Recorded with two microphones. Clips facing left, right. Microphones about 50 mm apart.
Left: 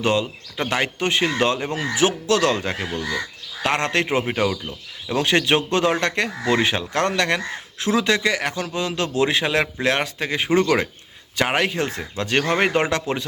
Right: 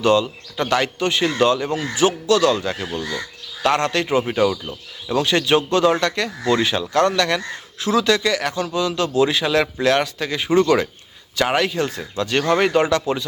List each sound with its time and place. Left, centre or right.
0.0 s speech: left
4.2 s speech: centre
5.1 s a man's voice: left